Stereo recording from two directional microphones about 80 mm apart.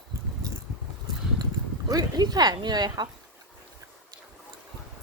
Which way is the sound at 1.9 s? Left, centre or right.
Right.